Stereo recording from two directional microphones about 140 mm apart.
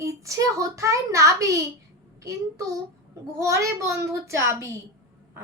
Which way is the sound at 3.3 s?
20° right (ahead or behind).